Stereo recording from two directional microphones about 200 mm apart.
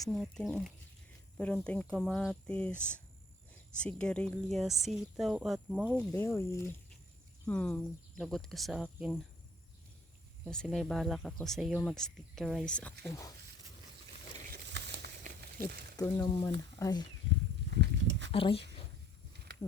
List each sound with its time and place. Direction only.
0.1 s speech: centre (ahead or behind)
6.1 s speech: 15° left (ahead or behind)
10.4 s speech: centre (ahead or behind)
14.5 s crumpling: 60° right (ahead or behind)
15.2 s a sound: 50° right (ahead or behind)
16.0 s speech: 20° left (ahead or behind)
17.7 s a sound: 65° right (ahead or behind)
18.3 s speech: 25° left (ahead or behind)